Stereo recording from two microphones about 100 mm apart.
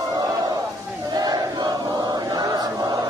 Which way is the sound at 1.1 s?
40° right (ahead or behind).